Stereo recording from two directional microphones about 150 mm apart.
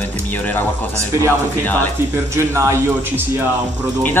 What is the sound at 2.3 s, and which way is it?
A man's voice, 20° right (ahead or behind).